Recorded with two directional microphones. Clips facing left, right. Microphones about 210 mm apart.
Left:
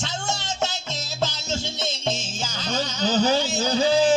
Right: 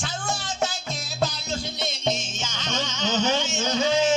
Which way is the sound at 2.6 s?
35° left (ahead or behind).